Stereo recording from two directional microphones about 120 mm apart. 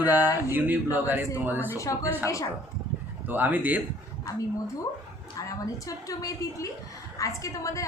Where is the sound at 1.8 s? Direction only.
30° left (ahead or behind).